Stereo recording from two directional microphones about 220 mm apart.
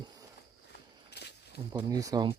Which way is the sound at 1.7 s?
15° right (ahead or behind).